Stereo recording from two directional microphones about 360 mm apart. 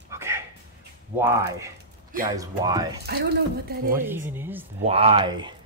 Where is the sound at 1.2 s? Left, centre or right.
Centre.